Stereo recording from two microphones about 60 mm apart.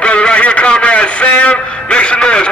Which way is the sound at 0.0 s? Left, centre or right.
Centre.